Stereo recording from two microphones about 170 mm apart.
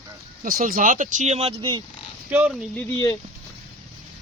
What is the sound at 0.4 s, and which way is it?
Speech, 55° right (ahead or behind).